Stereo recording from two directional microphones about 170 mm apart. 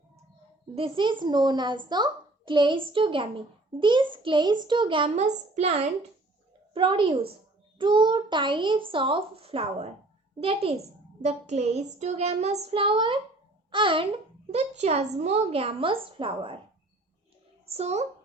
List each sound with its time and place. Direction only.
0.8 s a child's voice: 30° right (ahead or behind)
6.7 s a child's voice: 30° right (ahead or behind)
17.7 s a child's voice: 40° right (ahead or behind)